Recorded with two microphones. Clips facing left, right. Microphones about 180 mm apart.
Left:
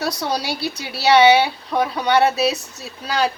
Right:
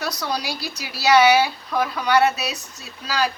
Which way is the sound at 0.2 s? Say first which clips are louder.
Left 4 dB; 30° left (ahead or behind).